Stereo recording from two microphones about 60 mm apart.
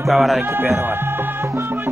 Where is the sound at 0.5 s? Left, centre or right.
Right.